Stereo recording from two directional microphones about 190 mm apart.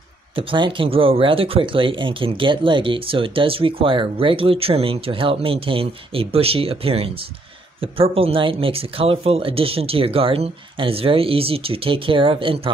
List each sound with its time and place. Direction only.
0.4 s speech: 25° right (ahead or behind)